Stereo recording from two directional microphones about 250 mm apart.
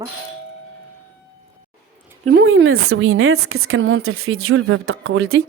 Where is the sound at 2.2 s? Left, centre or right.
Right.